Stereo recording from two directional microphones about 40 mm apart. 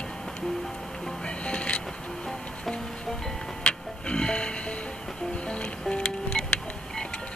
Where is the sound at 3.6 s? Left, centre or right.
Left.